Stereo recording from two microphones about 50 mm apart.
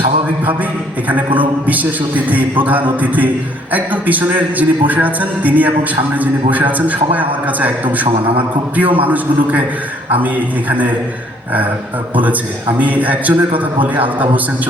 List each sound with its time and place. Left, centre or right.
1.0 s a man's voice: right
12.1 s a man's voice: right